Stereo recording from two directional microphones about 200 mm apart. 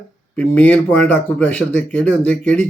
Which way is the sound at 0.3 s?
5° left (ahead or behind).